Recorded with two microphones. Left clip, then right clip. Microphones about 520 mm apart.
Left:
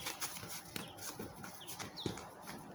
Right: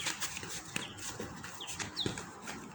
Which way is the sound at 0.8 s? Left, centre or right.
Left.